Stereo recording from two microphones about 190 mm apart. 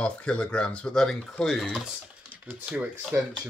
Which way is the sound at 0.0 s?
5° left (ahead or behind).